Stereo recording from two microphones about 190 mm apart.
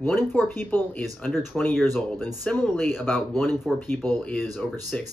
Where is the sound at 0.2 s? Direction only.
Centre (ahead or behind).